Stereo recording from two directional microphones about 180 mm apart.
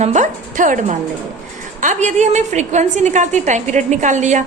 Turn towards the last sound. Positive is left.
turn(degrees=-40)  # may be behind; listen again after turning